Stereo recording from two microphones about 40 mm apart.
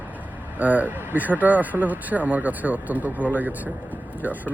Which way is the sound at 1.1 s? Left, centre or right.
Right.